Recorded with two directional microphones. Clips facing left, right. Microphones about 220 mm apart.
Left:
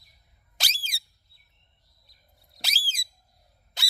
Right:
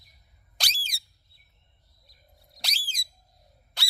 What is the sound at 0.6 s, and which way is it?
Squeak, centre (ahead or behind).